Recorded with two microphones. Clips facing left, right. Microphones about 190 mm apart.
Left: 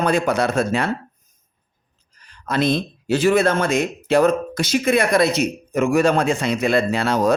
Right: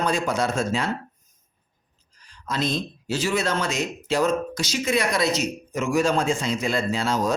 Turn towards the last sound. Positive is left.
turn(degrees=65)  # may be behind; listen again after turning